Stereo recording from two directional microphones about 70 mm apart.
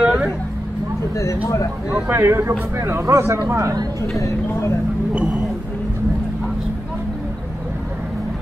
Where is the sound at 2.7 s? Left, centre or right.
Right.